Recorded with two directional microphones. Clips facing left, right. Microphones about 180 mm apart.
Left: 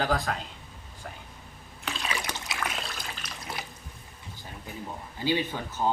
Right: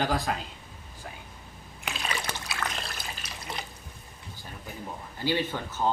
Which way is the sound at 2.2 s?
20° left (ahead or behind).